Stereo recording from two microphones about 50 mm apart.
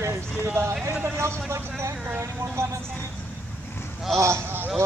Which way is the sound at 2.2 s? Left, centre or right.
Right.